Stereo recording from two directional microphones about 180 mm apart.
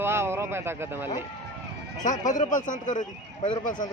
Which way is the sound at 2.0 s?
45° left (ahead or behind).